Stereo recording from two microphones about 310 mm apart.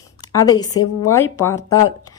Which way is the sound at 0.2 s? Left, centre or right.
Centre.